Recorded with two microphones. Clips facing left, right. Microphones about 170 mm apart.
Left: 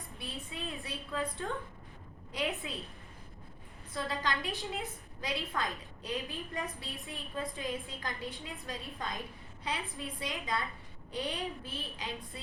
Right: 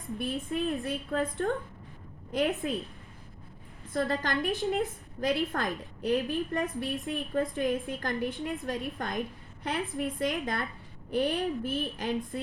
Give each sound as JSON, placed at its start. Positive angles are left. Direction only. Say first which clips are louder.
{"t": 0.2, "sound": "a woman's voice", "louder": "right 11 dB", "side_deg": -55}
{"t": 3.9, "sound": "a woman's voice", "louder": "right 6 dB", "side_deg": -55}